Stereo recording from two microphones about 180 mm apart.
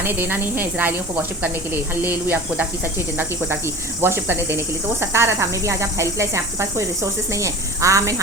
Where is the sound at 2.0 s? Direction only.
10° right (ahead or behind).